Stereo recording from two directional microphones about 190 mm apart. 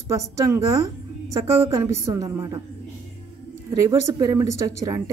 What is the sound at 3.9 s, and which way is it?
Speech, 20° right (ahead or behind).